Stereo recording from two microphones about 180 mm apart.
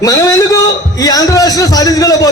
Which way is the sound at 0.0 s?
20° left (ahead or behind).